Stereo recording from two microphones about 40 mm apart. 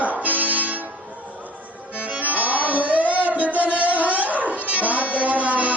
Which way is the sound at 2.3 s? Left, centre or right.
Right.